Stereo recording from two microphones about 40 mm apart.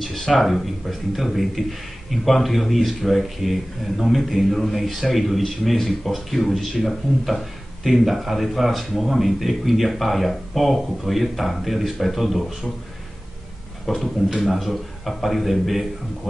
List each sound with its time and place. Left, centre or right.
0.0 s speech: centre
13.8 s speech: centre